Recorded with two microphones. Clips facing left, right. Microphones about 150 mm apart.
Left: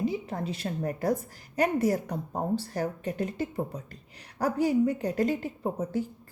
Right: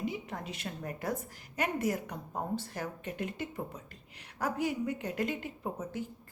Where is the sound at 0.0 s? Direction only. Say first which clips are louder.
Left 7 dB; 35° left (ahead or behind).